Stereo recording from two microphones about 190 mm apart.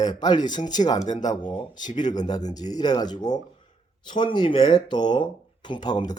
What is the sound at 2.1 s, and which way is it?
Speech, 20° left (ahead or behind).